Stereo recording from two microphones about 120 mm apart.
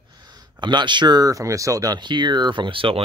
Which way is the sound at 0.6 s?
40° right (ahead or behind).